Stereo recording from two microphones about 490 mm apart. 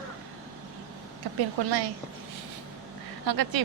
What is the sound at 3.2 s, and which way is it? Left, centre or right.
Speech, right.